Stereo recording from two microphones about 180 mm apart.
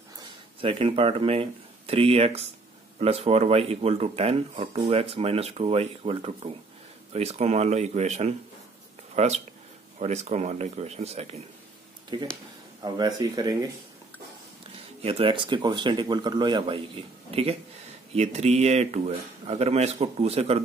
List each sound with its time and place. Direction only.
0.6 s speech: 30° right (ahead or behind)
12.1 s speech: 25° right (ahead or behind)
15.0 s speech: 35° right (ahead or behind)